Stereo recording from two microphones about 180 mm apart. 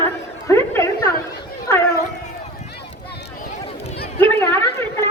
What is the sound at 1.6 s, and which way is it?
Dog, 15° left (ahead or behind).